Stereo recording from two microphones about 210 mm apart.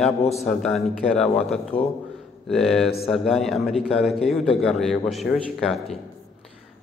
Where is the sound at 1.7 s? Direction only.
25° left (ahead or behind).